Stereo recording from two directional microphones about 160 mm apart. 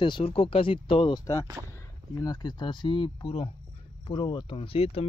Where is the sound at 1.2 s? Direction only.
20° left (ahead or behind).